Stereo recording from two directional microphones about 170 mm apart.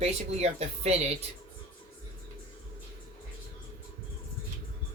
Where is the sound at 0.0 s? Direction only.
40° right (ahead or behind).